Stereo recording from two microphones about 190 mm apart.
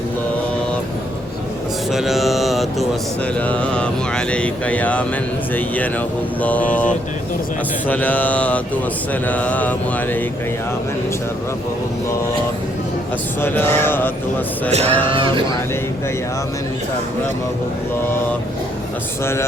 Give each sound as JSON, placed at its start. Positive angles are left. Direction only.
{"t": 1.9, "sound": "mantra", "side_deg": 0}
{"t": 3.3, "sound": "speech", "side_deg": 5}
{"t": 13.4, "sound": "speech", "side_deg": 10}
{"t": 14.7, "sound": "a sound", "side_deg": -35}
{"t": 15.1, "sound": "speech", "side_deg": -25}
{"t": 19.2, "sound": "speech", "side_deg": 15}